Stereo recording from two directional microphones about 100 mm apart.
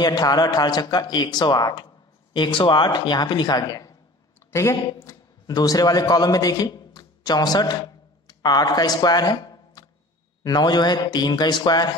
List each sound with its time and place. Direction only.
0.0 s a man's voice: 40° left (ahead or behind)
4.5 s speech: 25° left (ahead or behind)
5.5 s a man's voice: 40° left (ahead or behind)